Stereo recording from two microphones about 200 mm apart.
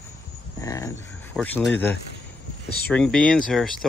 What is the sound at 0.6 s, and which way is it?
Speech, 15° left (ahead or behind).